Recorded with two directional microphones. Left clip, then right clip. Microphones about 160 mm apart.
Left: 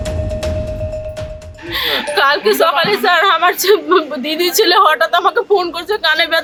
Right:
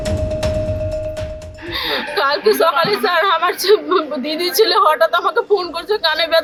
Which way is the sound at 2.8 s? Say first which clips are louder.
Left 3 dB; 5° left (ahead or behind).